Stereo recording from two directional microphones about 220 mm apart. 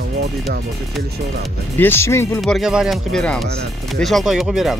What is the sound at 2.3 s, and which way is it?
Speech, centre (ahead or behind).